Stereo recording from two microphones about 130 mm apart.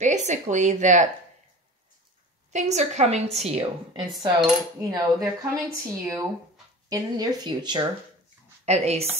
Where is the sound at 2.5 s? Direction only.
60° right (ahead or behind).